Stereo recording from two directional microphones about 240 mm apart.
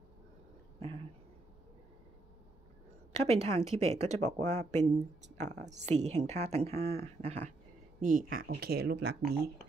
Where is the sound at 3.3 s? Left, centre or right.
Right.